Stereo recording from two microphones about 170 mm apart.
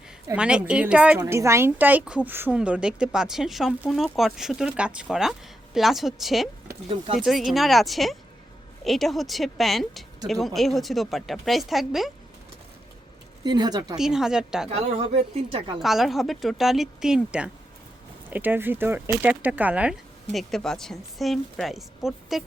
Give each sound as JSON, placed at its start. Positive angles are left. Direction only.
{"t": 0.3, "sound": "a woman's voice", "side_deg": -5}
{"t": 13.4, "sound": "speech", "side_deg": -25}
{"t": 13.9, "sound": "a woman's voice", "side_deg": -5}
{"t": 14.7, "sound": "a woman's voice", "side_deg": -35}
{"t": 15.8, "sound": "a woman's voice", "side_deg": 0}